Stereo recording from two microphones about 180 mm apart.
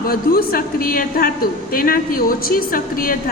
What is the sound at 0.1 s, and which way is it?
A woman's voice, 55° left (ahead or behind).